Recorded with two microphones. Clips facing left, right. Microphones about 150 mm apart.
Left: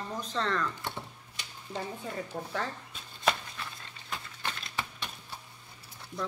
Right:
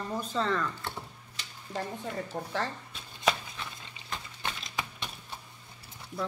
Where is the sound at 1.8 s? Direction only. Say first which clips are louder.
Right 2 dB; centre (ahead or behind).